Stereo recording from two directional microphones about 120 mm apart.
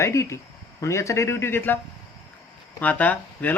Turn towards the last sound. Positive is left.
turn(degrees=15)  # may be behind; listen again after turning